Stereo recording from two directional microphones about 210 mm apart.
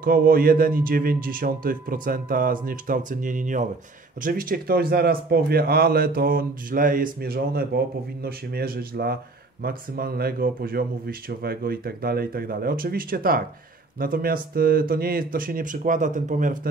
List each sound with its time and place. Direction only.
0.0 s a man's voice: 45° right (ahead or behind)